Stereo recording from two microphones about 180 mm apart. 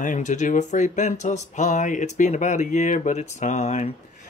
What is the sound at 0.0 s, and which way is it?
Speech, 45° left (ahead or behind).